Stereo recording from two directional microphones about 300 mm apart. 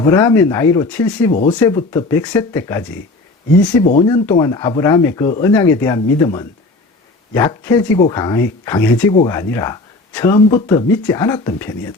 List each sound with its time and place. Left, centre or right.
0.1 s speech: centre
1.3 s speech: left
1.5 s speech: centre
3.9 s speech: centre